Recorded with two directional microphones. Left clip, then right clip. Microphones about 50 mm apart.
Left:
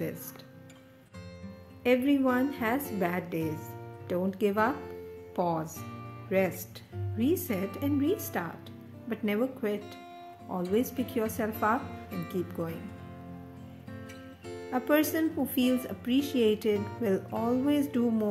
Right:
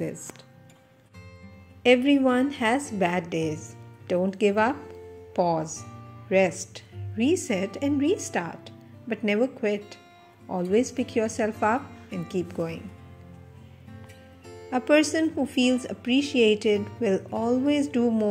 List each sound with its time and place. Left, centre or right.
1.8 s a woman's voice: right
3.0 s a woman's voice: right
4.1 s a woman's voice: right
14.5 s speech: right